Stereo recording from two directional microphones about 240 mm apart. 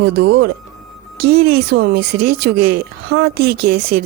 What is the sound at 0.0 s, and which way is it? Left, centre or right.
Speech, right.